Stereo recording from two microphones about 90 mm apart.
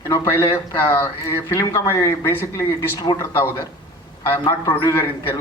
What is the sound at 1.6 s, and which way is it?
Speech, 40° left (ahead or behind).